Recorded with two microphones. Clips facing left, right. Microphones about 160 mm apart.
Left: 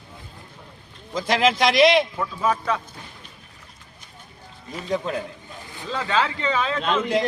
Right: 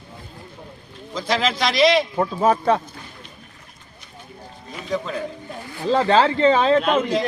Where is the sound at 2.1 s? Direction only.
40° right (ahead or behind).